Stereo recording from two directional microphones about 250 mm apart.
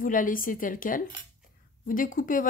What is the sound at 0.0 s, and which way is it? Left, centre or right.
Speech, left.